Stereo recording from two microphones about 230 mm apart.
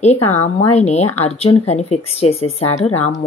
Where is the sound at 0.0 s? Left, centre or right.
Left.